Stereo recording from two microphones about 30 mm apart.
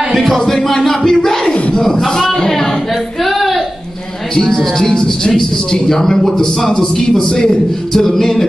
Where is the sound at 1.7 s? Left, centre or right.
Centre.